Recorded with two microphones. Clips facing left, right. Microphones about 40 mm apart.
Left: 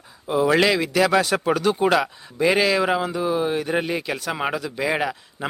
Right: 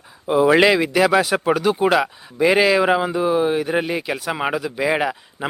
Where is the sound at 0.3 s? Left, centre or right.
Centre.